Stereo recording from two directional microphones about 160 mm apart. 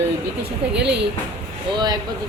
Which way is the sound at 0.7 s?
90° right.